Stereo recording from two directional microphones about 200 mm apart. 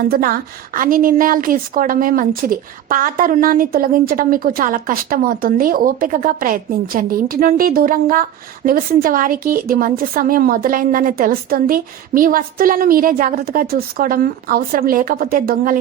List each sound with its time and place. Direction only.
0.1 s a woman's voice: 45° right (ahead or behind)